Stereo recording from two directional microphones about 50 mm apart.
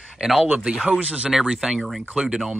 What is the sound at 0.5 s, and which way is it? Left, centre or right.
Speech, centre.